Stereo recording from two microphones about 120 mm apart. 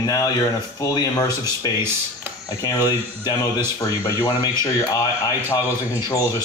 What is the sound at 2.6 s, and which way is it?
Speech, 25° left (ahead or behind).